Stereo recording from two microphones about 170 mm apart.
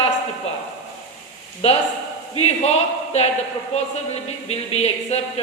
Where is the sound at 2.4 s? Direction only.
40° left (ahead or behind).